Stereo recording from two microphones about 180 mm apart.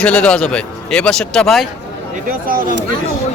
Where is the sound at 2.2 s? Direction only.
50° right (ahead or behind).